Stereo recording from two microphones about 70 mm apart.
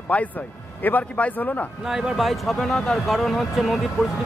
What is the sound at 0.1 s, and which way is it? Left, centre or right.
Speech, left.